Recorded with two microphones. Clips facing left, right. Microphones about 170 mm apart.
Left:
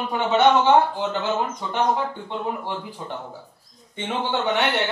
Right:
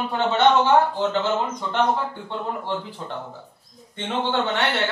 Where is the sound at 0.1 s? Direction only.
10° left (ahead or behind).